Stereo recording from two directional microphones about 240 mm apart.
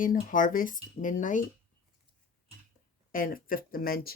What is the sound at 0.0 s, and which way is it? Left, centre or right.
Speech, left.